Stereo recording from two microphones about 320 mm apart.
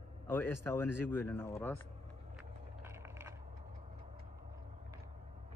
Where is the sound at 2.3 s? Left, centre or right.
Centre.